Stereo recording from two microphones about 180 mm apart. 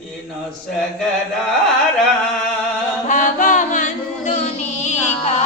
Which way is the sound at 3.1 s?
45° left (ahead or behind).